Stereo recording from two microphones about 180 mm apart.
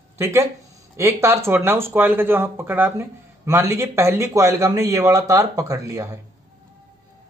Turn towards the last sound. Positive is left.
turn(degrees=-20)  # may be behind; listen again after turning